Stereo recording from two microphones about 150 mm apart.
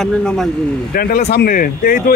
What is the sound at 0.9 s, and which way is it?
A man's voice, 75° left (ahead or behind).